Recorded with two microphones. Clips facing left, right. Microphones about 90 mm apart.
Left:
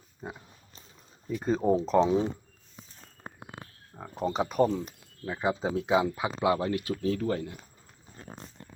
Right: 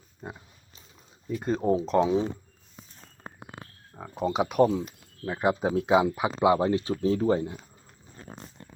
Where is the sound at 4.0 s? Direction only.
Centre (ahead or behind); by 7.5 s 25° right (ahead or behind).